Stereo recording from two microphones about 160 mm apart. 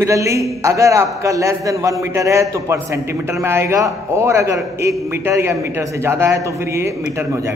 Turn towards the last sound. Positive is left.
turn(degrees=-20)  # may be behind; listen again after turning